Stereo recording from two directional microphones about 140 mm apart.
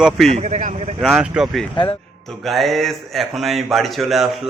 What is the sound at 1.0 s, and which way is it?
Speech, 5° right (ahead or behind).